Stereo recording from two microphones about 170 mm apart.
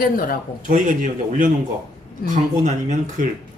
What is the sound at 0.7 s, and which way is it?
Speech, 50° right (ahead or behind).